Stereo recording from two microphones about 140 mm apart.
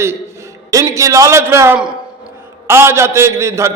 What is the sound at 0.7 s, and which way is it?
A man's voice, 25° right (ahead or behind).